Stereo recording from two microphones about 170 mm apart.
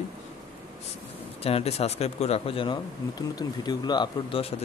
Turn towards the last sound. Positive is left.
turn(degrees=30)  # may be behind; listen again after turning